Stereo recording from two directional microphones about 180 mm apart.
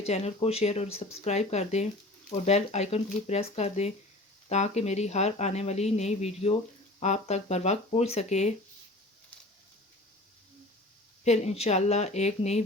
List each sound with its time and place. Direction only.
0.0 s speech: 35° left (ahead or behind)
11.2 s speech: 35° left (ahead or behind)